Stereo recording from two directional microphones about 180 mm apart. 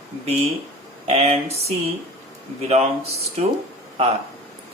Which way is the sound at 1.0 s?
35° right (ahead or behind).